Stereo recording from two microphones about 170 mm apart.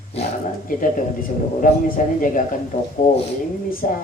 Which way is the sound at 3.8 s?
45° left (ahead or behind).